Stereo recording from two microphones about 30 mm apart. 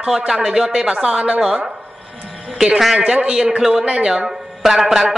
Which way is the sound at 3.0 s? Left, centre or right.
Right.